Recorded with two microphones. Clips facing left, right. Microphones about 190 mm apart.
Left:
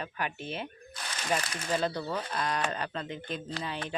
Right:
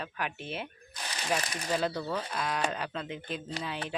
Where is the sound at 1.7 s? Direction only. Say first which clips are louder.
Even; 5° right (ahead or behind).